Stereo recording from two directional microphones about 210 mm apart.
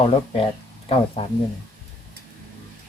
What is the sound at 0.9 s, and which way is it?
Speech, 25° left (ahead or behind).